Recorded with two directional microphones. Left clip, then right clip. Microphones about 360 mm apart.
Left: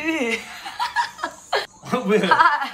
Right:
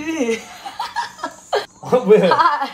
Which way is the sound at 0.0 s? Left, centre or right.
Centre.